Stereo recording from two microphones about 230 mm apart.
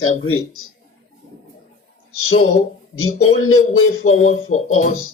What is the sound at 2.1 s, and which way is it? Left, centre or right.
A man's voice, left.